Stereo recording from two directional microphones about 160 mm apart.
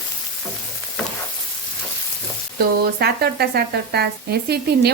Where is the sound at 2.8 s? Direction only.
80° right.